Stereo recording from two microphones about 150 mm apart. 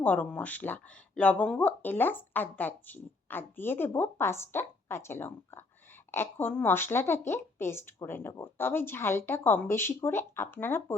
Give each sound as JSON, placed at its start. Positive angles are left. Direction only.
{"t": 0.0, "sound": "speech", "side_deg": 10}
{"t": 6.1, "sound": "a sound", "side_deg": 15}
{"t": 6.4, "sound": "speech", "side_deg": 15}